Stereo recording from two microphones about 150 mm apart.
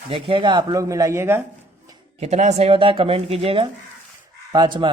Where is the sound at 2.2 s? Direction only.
50° right (ahead or behind).